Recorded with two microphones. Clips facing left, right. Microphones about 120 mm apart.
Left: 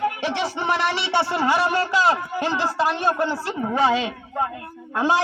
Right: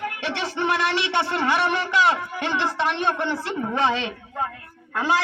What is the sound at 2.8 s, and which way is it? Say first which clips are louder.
Speech: left 3 dB; 10° left (ahead or behind).